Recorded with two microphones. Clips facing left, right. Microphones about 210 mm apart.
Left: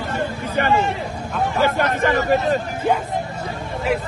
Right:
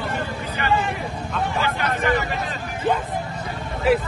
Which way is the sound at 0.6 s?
50° left (ahead or behind).